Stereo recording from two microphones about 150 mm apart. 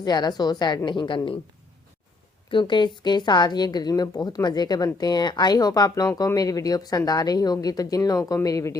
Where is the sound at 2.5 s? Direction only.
30° left (ahead or behind).